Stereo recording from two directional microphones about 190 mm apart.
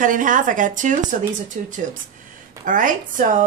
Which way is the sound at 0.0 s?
45° right (ahead or behind).